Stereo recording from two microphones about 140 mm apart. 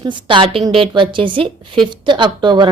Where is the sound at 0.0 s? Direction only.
35° right (ahead or behind).